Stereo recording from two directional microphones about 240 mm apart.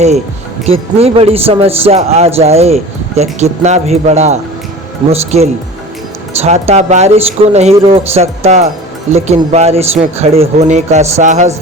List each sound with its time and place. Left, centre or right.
0.6 s a man's voice: right